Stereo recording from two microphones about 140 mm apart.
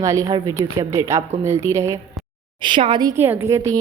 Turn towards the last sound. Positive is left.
turn(degrees=-20)  # may be behind; listen again after turning